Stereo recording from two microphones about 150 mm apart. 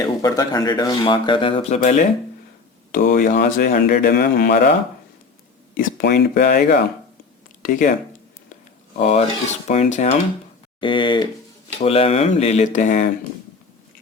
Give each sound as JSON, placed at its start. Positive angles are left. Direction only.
{"t": 0.0, "sound": "speech", "side_deg": 25}
{"t": 1.8, "sound": "speech", "side_deg": 55}
{"t": 2.9, "sound": "speech", "side_deg": 70}
{"t": 5.7, "sound": "speech", "side_deg": 80}
{"t": 7.6, "sound": "speech", "side_deg": 60}
{"t": 9.0, "sound": "speech", "side_deg": 50}
{"t": 10.8, "sound": "speech", "side_deg": 35}